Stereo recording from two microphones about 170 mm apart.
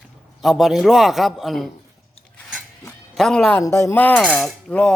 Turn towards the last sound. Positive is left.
turn(degrees=5)  # may be behind; listen again after turning